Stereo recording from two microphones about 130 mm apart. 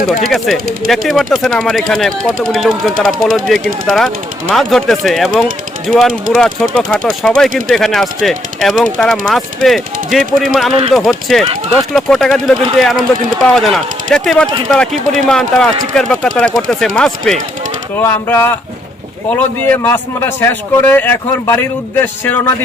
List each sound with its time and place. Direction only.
0.3 s speech: centre (ahead or behind)
18.0 s a man's voice: 20° left (ahead or behind)
19.7 s a man's voice: 15° left (ahead or behind)